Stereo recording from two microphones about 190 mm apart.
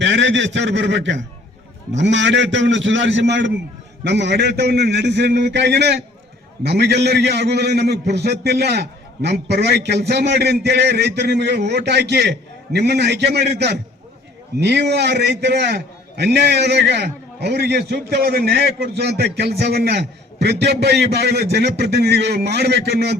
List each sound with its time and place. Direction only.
0.0 s a man's voice: 70° right (ahead or behind)